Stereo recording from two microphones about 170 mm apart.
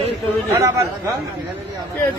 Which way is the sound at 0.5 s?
15° right (ahead or behind).